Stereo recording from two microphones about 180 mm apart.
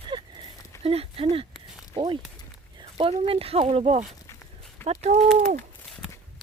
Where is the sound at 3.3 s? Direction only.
30° right (ahead or behind).